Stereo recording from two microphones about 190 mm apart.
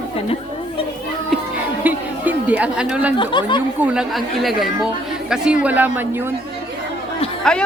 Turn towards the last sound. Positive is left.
turn(degrees=5)  # may be behind; listen again after turning